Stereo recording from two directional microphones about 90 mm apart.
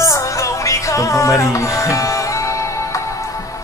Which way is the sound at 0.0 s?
35° left (ahead or behind).